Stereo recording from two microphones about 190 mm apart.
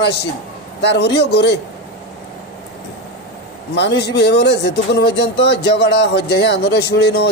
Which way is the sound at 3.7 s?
65° left (ahead or behind).